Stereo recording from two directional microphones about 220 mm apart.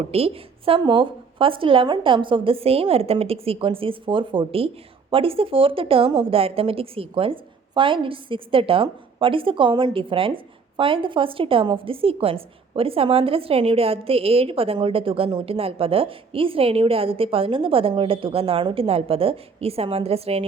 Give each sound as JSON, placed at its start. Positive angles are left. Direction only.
{"t": 0.1, "sound": "speech", "side_deg": -25}